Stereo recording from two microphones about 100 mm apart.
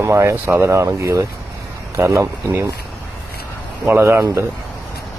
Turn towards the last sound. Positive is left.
turn(degrees=-20)  # may be behind; listen again after turning